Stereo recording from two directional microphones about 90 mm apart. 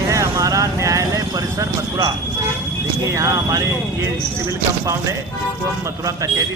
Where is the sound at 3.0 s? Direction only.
35° right (ahead or behind).